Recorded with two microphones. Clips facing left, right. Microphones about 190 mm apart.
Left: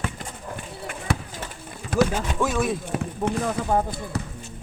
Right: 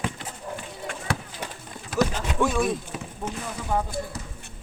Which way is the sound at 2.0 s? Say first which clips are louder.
Left 1 dB; 5° left (ahead or behind).